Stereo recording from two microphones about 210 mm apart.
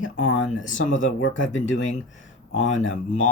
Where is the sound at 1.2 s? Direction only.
65° left (ahead or behind).